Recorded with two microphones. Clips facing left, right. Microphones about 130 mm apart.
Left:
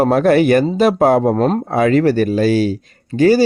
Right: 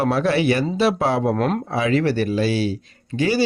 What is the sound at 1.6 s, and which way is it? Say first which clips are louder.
Speech: left 6 dB; 50° left (ahead or behind).